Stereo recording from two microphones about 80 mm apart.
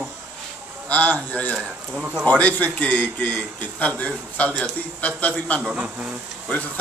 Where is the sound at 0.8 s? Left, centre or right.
Centre.